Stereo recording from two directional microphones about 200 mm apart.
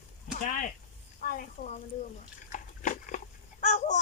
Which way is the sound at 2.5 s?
40° left (ahead or behind).